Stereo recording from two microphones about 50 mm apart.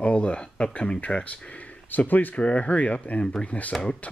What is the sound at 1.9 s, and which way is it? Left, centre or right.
Speech, left.